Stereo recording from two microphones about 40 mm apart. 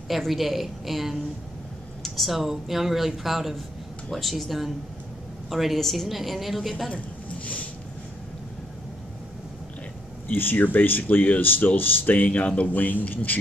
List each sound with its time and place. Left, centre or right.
0.3 s speech: centre
6.9 s a sound: left
10.2 s speech: left